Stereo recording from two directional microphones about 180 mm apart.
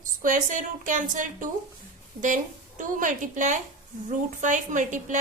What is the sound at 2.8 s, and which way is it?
A woman's voice, 45° right (ahead or behind).